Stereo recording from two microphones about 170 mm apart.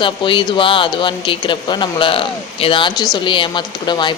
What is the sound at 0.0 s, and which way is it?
Speech, 30° left (ahead or behind).